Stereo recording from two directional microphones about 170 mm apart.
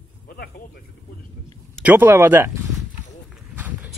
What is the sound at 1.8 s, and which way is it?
Speech, 10° right (ahead or behind).